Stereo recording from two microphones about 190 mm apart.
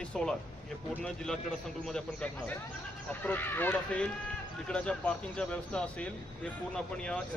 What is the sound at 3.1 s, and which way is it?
A man's voice, 10° left (ahead or behind).